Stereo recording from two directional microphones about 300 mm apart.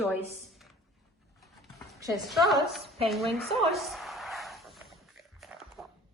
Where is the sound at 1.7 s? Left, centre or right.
Centre.